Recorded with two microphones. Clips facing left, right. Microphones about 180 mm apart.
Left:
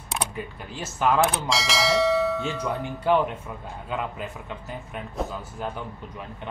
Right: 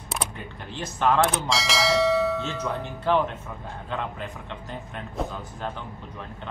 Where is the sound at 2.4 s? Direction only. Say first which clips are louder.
Left 1 dB; 10° left (ahead or behind).